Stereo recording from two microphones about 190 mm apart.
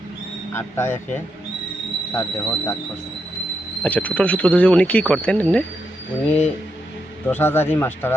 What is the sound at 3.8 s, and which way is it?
Speech, 10° left (ahead or behind).